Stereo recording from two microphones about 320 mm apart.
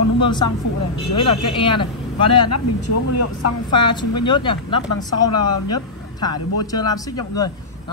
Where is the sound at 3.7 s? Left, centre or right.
Centre.